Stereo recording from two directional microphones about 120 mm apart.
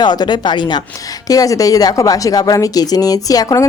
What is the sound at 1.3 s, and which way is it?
Speech, 30° left (ahead or behind).